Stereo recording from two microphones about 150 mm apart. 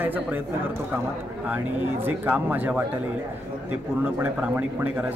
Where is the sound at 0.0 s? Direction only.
10° right (ahead or behind).